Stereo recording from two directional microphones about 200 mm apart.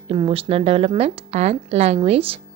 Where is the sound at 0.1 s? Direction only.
30° right (ahead or behind).